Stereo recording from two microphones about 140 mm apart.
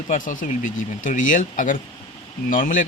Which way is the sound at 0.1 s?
70° left (ahead or behind).